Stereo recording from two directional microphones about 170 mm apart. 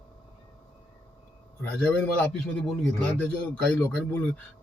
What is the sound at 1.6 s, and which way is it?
Speech, 10° left (ahead or behind).